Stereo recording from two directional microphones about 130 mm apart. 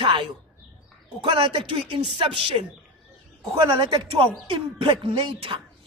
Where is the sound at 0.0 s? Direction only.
40° right (ahead or behind).